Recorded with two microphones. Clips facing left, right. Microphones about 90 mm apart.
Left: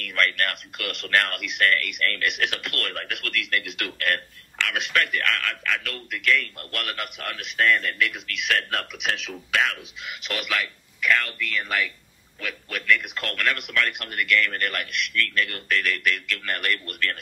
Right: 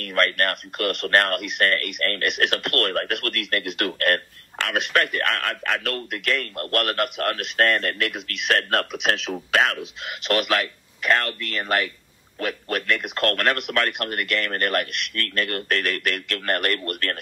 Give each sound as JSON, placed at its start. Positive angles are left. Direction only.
{"t": 0.0, "sound": "speech", "side_deg": -40}
{"t": 8.9, "sound": "speech", "side_deg": -30}